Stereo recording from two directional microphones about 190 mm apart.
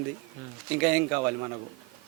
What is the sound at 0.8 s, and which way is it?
Speech, 10° right (ahead or behind).